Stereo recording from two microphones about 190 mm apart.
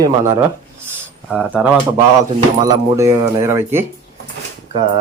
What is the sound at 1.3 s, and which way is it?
Speech, 5° right (ahead or behind).